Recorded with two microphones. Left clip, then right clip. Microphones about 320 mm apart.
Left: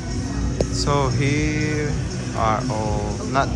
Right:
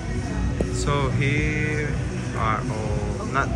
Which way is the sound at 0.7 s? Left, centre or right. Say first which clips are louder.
Left 4 dB; centre.